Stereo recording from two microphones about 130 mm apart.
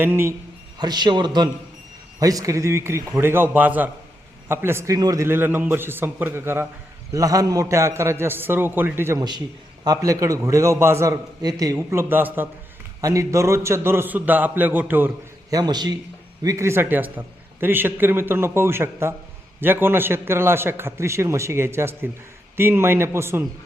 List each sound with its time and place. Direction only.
0.0 s a man's voice: 20° right (ahead or behind)
0.8 s a man's voice: 35° right (ahead or behind); by 15.1 s 15° right (ahead or behind)
15.4 s a man's voice: 30° right (ahead or behind)